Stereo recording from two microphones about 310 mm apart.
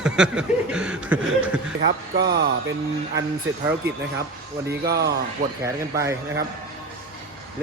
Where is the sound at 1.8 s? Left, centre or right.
Right.